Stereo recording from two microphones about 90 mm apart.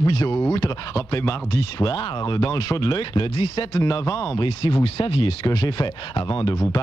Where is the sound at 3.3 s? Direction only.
70° left (ahead or behind).